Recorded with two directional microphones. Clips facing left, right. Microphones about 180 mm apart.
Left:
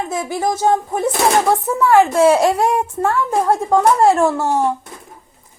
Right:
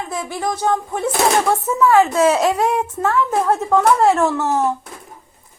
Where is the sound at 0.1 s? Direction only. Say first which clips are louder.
Left 2 dB; 20° left (ahead or behind).